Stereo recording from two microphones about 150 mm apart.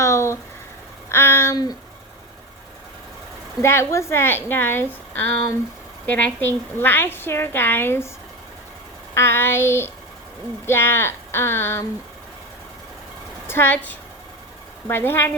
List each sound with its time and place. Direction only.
0.0 s a sound: 20° left (ahead or behind)
3.6 s a woman's voice: 15° left (ahead or behind)
9.1 s a woman's voice: 15° left (ahead or behind)
13.5 s a woman's voice: 15° left (ahead or behind)